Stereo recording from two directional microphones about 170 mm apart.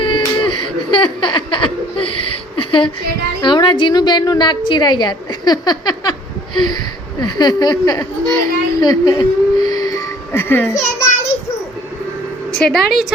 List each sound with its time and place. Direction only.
0.0 s a sound: 30° left (ahead or behind)
0.9 s chuckle: 30° left (ahead or behind)
3.4 s a woman's voice: 25° left (ahead or behind)
7.2 s speech: 25° left (ahead or behind)
8.8 s a sound: 25° left (ahead or behind)
12.5 s a woman's voice: 5° left (ahead or behind)